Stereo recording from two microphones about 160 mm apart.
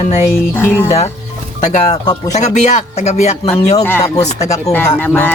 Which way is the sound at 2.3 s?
45° left (ahead or behind).